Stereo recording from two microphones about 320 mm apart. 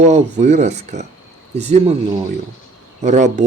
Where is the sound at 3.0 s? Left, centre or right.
Right.